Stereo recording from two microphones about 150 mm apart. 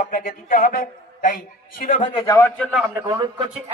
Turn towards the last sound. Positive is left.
turn(degrees=-25)  # may be behind; listen again after turning